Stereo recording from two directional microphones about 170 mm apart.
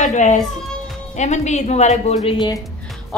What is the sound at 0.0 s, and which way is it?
Speech, 45° left (ahead or behind).